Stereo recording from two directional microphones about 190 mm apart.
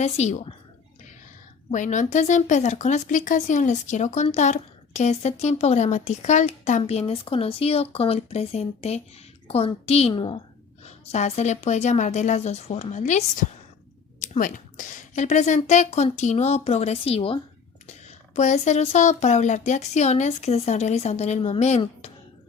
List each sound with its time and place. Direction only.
0.0 s speech: 35° left (ahead or behind)
1.7 s a woman's voice: 40° left (ahead or behind)